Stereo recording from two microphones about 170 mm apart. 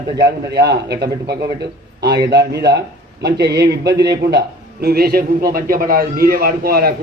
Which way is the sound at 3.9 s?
25° right (ahead or behind).